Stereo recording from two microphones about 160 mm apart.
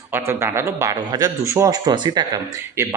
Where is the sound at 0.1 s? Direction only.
15° right (ahead or behind).